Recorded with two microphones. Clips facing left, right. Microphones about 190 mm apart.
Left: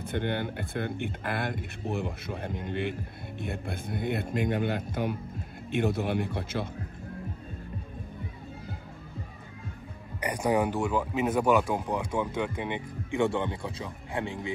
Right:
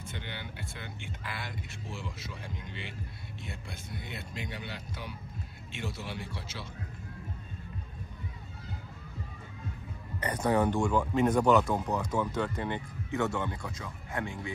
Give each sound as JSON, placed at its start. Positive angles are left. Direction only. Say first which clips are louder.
{"t": 0.0, "sound": "speech", "louder": "left 12 dB", "side_deg": 55}
{"t": 10.2, "sound": "speech", "louder": "left 1 dB", "side_deg": 10}
{"t": 13.2, "sound": "speech", "louder": "left 5 dB", "side_deg": 25}